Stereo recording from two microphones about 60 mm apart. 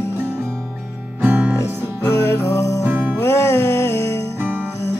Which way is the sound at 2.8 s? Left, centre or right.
Right.